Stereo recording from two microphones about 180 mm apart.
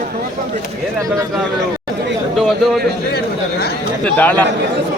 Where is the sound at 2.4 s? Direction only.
Centre (ahead or behind).